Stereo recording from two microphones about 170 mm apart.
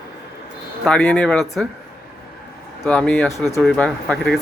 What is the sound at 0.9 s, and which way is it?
Speech, 5° left (ahead or behind).